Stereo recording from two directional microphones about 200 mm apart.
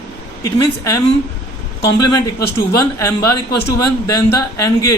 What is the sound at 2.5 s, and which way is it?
A man's voice, 15° left (ahead or behind).